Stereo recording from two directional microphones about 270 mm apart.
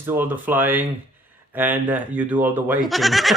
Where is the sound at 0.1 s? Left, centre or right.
Centre.